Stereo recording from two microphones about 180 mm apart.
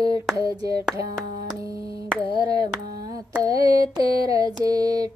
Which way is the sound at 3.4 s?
20° right (ahead or behind).